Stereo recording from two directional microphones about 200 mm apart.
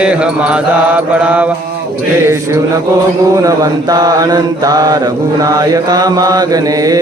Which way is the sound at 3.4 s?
15° right (ahead or behind).